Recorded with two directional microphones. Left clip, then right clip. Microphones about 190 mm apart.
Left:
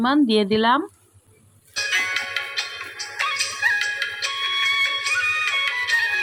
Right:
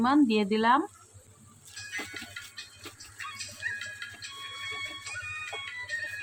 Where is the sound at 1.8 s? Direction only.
45° left (ahead or behind).